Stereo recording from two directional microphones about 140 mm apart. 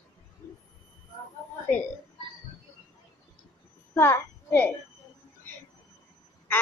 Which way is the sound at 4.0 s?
15° left (ahead or behind).